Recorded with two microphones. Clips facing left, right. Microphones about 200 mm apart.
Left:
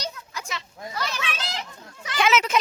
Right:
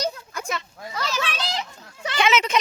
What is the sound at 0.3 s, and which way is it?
Children playing, 55° right (ahead or behind).